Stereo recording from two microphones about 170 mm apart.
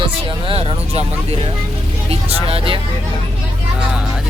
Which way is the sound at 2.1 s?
35° right (ahead or behind).